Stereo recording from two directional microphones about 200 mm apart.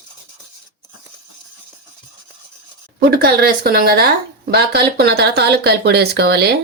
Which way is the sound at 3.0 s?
50° right (ahead or behind).